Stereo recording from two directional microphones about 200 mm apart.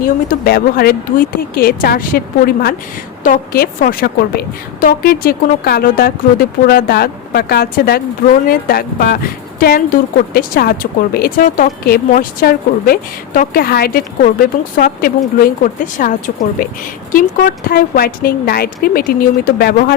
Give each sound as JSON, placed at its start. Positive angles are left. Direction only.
{"t": 0.0, "sound": "a woman's voice", "side_deg": 50}
{"t": 15.4, "sound": "a woman's voice", "side_deg": 45}